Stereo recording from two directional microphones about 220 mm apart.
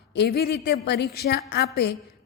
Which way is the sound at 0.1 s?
50° left (ahead or behind).